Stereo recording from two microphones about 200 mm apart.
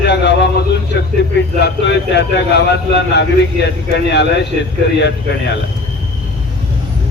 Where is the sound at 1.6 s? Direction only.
60° left (ahead or behind).